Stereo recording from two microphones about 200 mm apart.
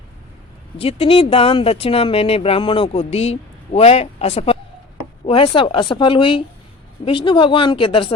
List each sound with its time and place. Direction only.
0.8 s speech: 30° left (ahead or behind)